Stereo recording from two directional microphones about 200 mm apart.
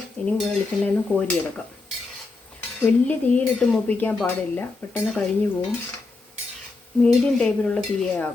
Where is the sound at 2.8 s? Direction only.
10° left (ahead or behind).